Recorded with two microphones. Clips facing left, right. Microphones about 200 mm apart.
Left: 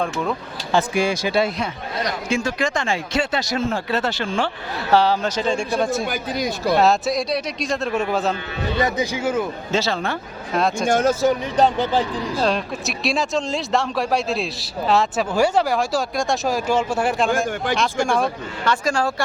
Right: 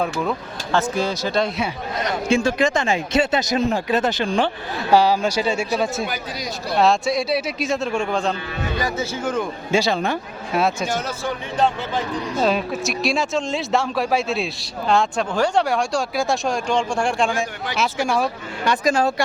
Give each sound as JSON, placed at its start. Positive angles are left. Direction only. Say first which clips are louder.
{"t": 0.0, "sound": "speech", "louder": "right 1 dB", "side_deg": 0}
{"t": 0.7, "sound": "speech", "louder": "left 2 dB", "side_deg": 10}
{"t": 2.3, "sound": "speech", "louder": "right 5 dB", "side_deg": -30}
{"t": 6.1, "sound": "speech", "louder": "left 5 dB", "side_deg": 50}
{"t": 6.7, "sound": "speech", "louder": "right 1 dB", "side_deg": 0}
{"t": 9.7, "sound": "speech", "louder": "right 3 dB", "side_deg": -15}
{"t": 10.5, "sound": "speech", "louder": "even", "side_deg": -5}
{"t": 10.8, "sound": "speech", "louder": "left 8 dB", "side_deg": 50}
{"t": 12.4, "sound": "speech", "louder": "right 3 dB", "side_deg": -5}
{"t": 18.6, "sound": "speech", "louder": "right 2 dB", "side_deg": -15}